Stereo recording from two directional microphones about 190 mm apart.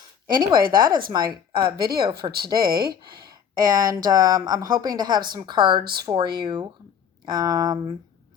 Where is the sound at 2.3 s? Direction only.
55° right (ahead or behind).